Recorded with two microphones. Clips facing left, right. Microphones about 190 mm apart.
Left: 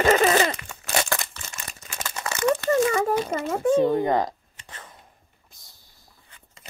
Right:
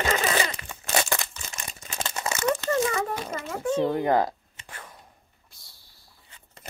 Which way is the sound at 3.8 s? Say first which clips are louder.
Left 2 dB; 5° right (ahead or behind).